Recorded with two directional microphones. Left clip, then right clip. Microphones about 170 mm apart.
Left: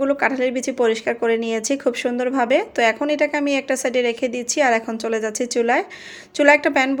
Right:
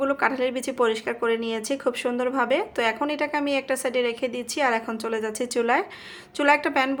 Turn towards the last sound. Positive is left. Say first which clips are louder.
# left 6 dB
turn(degrees=20)  # may be behind; listen again after turning